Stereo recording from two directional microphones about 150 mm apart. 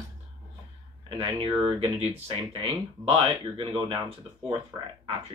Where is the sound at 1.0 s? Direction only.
35° right (ahead or behind).